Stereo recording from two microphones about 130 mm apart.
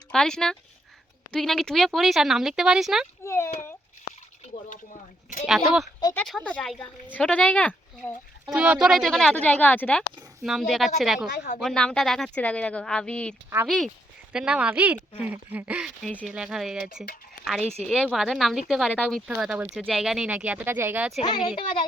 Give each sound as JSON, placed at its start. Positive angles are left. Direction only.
{"t": 0.1, "sound": "speech", "side_deg": 5}
{"t": 3.2, "sound": "a sound", "side_deg": 20}
{"t": 5.5, "sound": "speech", "side_deg": 0}
{"t": 8.4, "sound": "speech", "side_deg": -10}
{"t": 10.4, "sound": "speech", "side_deg": 0}
{"t": 14.3, "sound": "speech", "side_deg": -10}
{"t": 21.2, "sound": "speech", "side_deg": 35}